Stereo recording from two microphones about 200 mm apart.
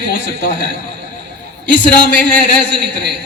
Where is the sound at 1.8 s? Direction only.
5° left (ahead or behind).